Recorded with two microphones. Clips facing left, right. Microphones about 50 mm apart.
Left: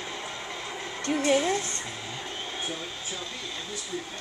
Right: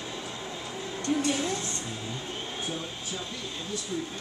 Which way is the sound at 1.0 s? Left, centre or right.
Left.